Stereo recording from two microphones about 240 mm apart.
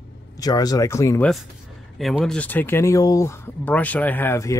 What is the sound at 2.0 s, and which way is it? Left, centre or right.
Speech, centre.